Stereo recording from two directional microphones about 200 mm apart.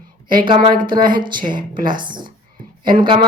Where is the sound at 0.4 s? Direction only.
25° right (ahead or behind).